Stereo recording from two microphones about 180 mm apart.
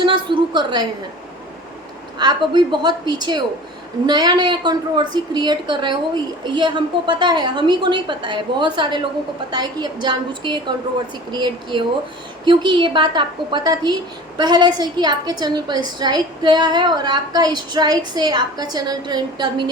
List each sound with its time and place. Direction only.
0.0 s a woman's voice: 25° right (ahead or behind)
2.1 s a woman's voice: 25° right (ahead or behind)